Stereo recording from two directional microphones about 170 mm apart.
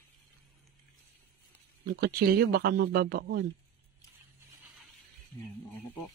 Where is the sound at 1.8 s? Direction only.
65° right (ahead or behind).